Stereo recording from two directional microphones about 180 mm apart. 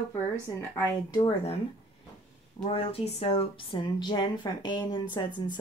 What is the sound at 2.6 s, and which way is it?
A woman's voice, 35° left (ahead or behind).